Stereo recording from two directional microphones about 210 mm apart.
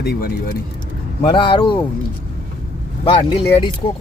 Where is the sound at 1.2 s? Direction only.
25° left (ahead or behind).